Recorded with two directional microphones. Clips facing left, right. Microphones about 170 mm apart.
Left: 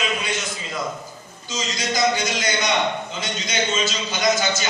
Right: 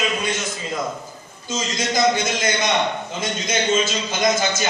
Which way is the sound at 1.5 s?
50° right (ahead or behind).